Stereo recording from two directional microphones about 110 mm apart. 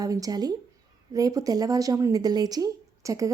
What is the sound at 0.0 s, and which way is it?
A woman's voice, 35° right (ahead or behind).